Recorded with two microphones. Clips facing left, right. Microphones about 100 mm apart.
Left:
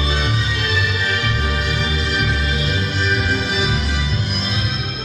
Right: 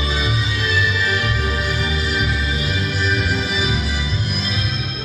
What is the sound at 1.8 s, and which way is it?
Music, 10° right (ahead or behind).